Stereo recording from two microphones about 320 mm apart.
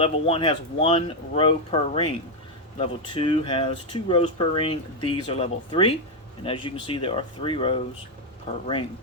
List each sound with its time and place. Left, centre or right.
0.0 s speech: centre